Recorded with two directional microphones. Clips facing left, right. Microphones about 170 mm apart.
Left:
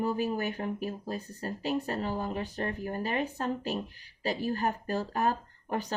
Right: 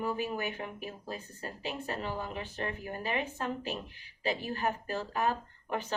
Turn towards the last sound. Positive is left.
turn(degrees=40)  # may be behind; listen again after turning